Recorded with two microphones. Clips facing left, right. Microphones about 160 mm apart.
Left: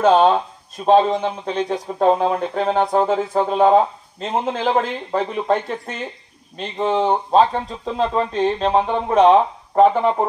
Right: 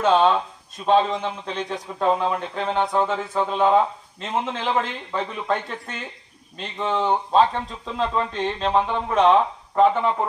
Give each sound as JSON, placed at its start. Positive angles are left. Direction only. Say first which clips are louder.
{"t": 0.0, "sound": "a man's voice", "louder": "left 4 dB", "side_deg": 35}